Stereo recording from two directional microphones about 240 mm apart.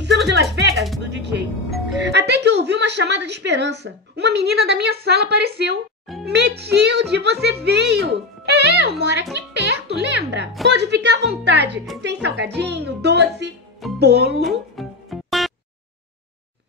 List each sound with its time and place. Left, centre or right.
0.0 s music: right
2.0 s a woman's voice: right
14.4 s music: centre